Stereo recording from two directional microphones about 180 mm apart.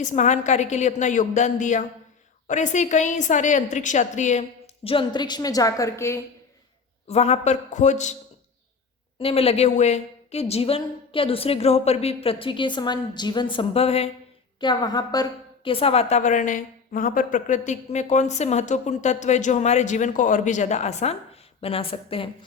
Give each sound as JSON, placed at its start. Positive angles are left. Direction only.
{"t": 0.0, "sound": "a woman's voice", "side_deg": 40}
{"t": 7.1, "sound": "a woman's voice", "side_deg": 35}
{"t": 9.1, "sound": "a woman's voice", "side_deg": 30}
{"t": 14.6, "sound": "a woman's voice", "side_deg": 25}